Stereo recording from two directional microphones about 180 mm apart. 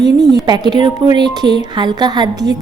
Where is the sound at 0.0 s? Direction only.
20° right (ahead or behind).